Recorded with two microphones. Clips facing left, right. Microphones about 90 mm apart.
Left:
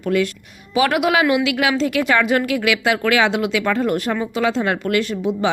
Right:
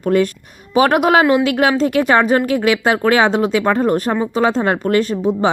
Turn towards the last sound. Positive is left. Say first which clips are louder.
# right 4 dB
turn(degrees=-40)  # may be behind; listen again after turning